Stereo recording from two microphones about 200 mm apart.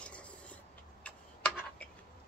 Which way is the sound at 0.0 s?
5° left (ahead or behind).